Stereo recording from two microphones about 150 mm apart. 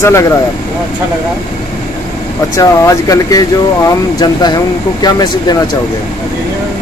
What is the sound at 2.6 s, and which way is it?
Speech, 25° left (ahead or behind).